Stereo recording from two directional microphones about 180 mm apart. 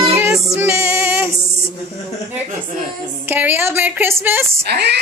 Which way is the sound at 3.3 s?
10° right (ahead or behind).